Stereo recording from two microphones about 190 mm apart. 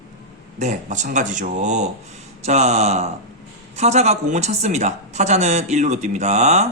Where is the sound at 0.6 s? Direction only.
40° right (ahead or behind).